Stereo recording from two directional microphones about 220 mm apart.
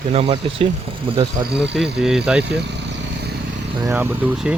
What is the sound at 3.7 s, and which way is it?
Speech, 15° right (ahead or behind).